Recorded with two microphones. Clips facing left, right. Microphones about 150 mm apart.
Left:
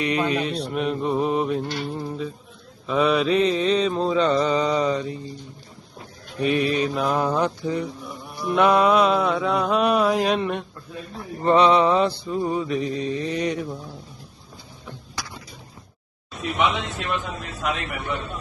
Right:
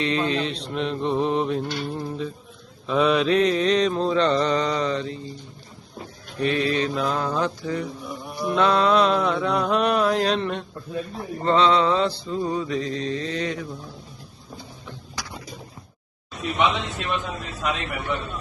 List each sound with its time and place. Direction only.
0.0 s mantra: 10° left (ahead or behind)
6.4 s mantra: 10° left (ahead or behind)
16.4 s mantra: centre (ahead or behind)